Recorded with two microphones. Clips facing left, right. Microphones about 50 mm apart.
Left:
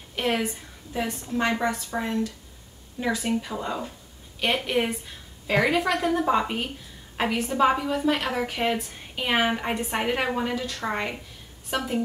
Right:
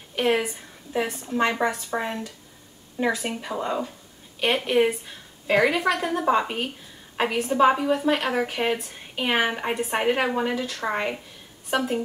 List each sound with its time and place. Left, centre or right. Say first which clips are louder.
0.1 s a woman's voice: right 3 dB; centre